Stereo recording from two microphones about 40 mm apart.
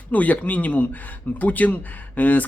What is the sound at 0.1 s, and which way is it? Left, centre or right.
Speech, left.